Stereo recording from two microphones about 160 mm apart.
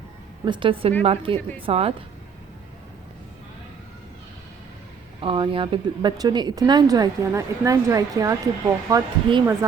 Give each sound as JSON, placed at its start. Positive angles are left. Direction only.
{"t": 0.4, "sound": "a woman's voice", "side_deg": -30}
{"t": 5.2, "sound": "speech", "side_deg": -35}